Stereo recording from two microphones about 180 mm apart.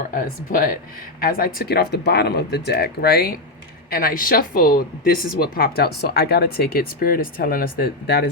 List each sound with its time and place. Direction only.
0.1 s speech: 50° left (ahead or behind)